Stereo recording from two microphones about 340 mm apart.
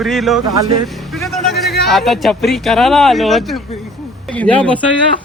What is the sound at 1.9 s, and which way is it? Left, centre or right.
A man's voice, centre.